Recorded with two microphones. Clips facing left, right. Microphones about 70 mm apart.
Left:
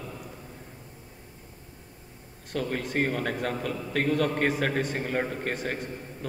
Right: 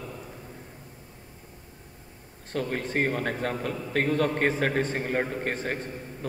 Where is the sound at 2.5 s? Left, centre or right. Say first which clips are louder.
Even; right.